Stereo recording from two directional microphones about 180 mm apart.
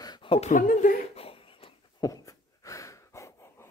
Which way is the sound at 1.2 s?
30° left (ahead or behind).